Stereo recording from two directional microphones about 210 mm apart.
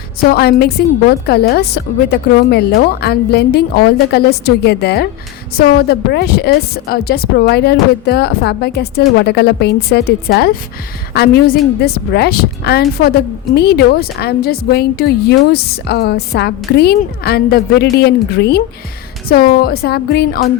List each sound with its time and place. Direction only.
0.3 s a woman's voice: 50° left (ahead or behind)